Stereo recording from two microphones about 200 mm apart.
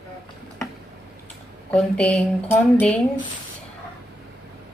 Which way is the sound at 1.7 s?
5° left (ahead or behind).